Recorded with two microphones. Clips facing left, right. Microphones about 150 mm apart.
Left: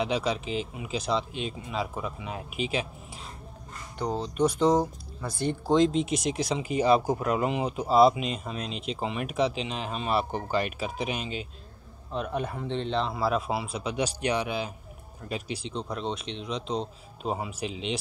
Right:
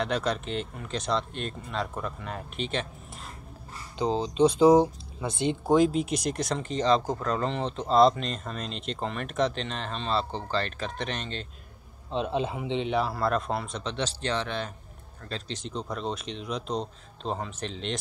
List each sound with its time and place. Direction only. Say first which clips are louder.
0.0 s speech: even; centre (ahead or behind)
4.0 s speech: right 3 dB; 25° right (ahead or behind)
5.7 s speech: even; 5° right (ahead or behind)
12.1 s speech: right 3 dB; 25° right (ahead or behind); by 15.7 s 10° left (ahead or behind)
15.7 s speech: right 1 dB; centre (ahead or behind)